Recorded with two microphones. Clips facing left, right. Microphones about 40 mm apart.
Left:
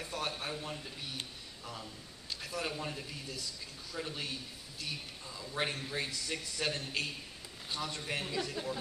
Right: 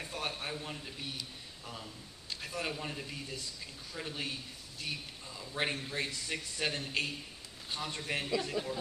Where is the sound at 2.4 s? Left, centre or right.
Centre.